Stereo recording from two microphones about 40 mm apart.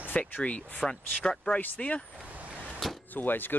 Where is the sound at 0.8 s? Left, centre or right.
Left.